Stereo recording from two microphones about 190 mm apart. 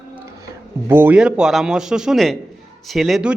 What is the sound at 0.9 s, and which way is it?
A man's voice, 10° right (ahead or behind).